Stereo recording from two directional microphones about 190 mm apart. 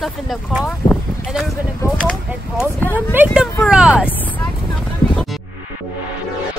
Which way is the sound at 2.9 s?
10° right (ahead or behind).